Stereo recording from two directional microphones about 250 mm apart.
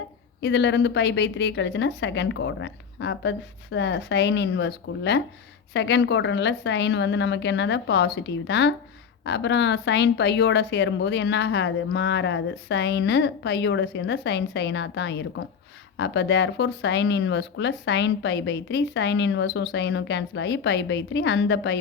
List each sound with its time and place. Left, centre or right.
0.4 s speech: left